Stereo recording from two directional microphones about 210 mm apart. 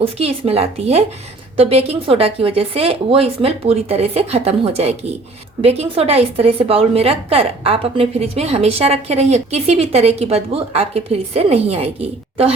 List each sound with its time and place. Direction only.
0.0 s a woman's voice: 30° right (ahead or behind)